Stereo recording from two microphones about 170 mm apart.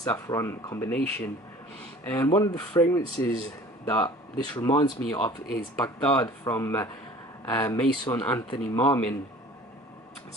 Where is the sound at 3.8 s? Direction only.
10° left (ahead or behind).